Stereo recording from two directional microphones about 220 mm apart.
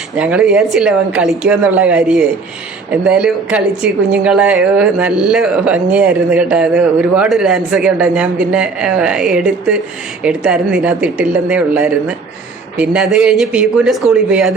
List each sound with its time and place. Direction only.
0.2 s a woman's voice: 5° right (ahead or behind)